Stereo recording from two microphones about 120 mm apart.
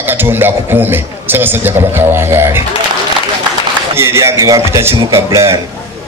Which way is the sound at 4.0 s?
20° right (ahead or behind).